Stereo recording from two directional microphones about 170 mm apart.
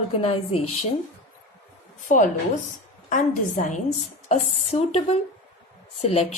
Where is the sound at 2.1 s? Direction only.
50° left (ahead or behind).